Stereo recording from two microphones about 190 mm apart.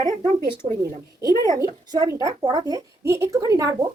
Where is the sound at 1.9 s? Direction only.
15° right (ahead or behind).